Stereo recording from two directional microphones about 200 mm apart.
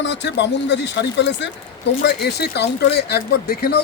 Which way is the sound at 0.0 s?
60° left (ahead or behind).